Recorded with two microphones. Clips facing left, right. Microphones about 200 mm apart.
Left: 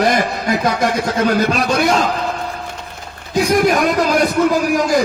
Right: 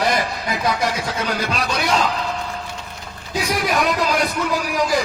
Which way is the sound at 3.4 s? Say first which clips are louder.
Left 7 dB; 50° left (ahead or behind).